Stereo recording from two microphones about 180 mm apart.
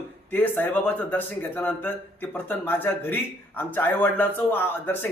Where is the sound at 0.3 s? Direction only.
10° left (ahead or behind).